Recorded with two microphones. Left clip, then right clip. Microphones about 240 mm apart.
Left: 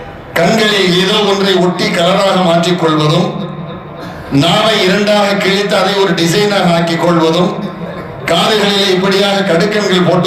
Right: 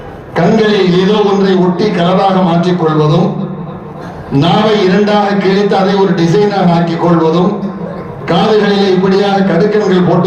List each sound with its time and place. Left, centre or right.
0.3 s a man's voice: left
4.4 s a man's voice: left